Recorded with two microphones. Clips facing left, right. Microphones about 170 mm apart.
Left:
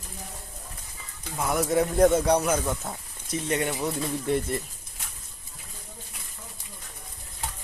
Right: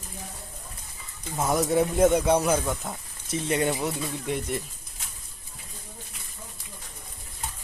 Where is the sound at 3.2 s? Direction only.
30° right (ahead or behind).